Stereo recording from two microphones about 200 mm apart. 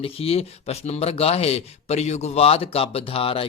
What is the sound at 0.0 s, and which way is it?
Speech, 30° left (ahead or behind).